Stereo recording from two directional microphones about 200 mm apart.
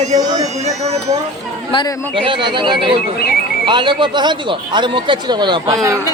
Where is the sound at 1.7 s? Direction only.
25° left (ahead or behind).